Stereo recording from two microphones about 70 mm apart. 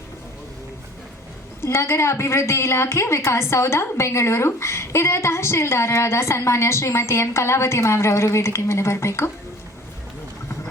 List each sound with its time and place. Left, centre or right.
1.6 s a woman's voice: left